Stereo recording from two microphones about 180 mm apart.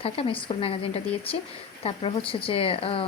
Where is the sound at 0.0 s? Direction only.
30° left (ahead or behind).